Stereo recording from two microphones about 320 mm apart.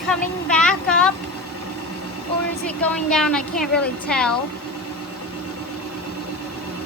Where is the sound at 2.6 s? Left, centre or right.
Centre.